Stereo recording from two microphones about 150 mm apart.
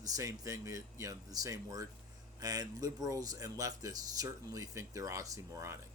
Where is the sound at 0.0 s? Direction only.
25° right (ahead or behind).